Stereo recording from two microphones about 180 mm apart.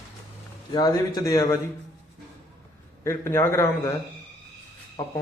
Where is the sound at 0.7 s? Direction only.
20° left (ahead or behind).